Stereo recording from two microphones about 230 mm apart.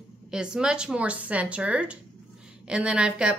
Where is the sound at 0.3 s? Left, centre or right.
Centre.